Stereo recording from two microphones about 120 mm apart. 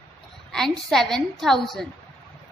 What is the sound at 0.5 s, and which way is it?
A woman's voice, 5° left (ahead or behind).